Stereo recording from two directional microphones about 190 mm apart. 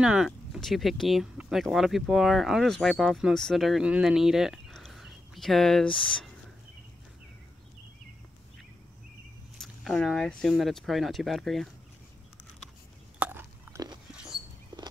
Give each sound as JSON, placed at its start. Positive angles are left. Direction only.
{"t": 0.0, "sound": "speech", "side_deg": -5}
{"t": 9.6, "sound": "speech", "side_deg": 0}
{"t": 13.2, "sound": "chewing", "side_deg": -10}
{"t": 14.1, "sound": "a sound", "side_deg": -5}
{"t": 14.7, "sound": "horse", "side_deg": -25}